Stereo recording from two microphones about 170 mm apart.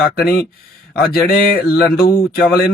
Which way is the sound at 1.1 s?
60° left (ahead or behind).